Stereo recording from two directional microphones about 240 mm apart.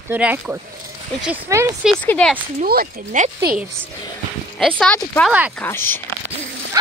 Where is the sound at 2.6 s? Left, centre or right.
Right.